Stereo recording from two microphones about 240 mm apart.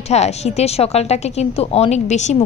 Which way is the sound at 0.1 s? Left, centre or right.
Left.